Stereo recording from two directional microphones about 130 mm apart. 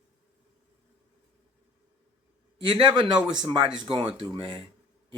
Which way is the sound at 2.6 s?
40° right (ahead or behind).